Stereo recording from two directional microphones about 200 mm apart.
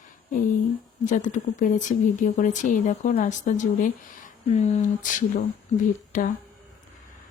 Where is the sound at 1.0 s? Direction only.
40° left (ahead or behind).